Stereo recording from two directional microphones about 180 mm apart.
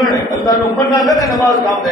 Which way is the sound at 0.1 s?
20° left (ahead or behind).